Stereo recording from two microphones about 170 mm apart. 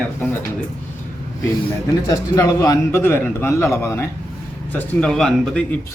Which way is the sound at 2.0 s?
20° left (ahead or behind).